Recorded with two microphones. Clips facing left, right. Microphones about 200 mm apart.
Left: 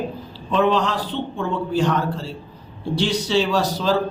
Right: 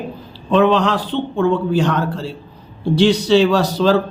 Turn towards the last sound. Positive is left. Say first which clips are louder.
# right 6 dB
turn(degrees=-65)  # may be behind; listen again after turning